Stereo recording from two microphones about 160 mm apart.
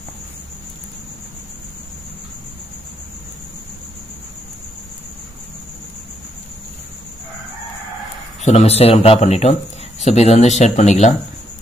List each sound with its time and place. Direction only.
8.5 s speech: 40° left (ahead or behind)